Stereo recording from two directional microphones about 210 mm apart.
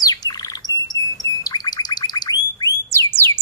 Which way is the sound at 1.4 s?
20° left (ahead or behind).